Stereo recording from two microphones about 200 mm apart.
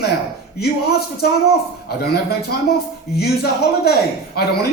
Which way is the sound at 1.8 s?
50° left (ahead or behind).